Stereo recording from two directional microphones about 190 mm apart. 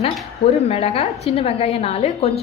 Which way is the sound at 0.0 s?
35° left (ahead or behind).